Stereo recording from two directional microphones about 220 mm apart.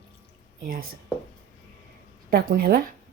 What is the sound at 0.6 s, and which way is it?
Speech, 40° right (ahead or behind).